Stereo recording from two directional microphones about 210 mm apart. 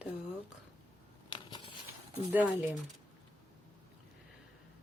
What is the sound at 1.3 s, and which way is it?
Patter, 20° left (ahead or behind).